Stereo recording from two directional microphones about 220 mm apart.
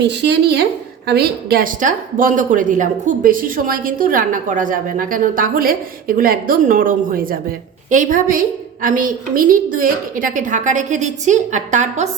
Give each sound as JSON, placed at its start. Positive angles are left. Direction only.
{"t": 0.0, "sound": "a woman's voice", "side_deg": -50}